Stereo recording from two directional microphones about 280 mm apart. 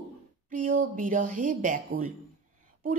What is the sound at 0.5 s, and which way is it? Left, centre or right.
Speech, right.